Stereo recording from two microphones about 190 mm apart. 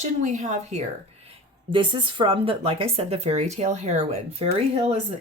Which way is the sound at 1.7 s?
25° right (ahead or behind).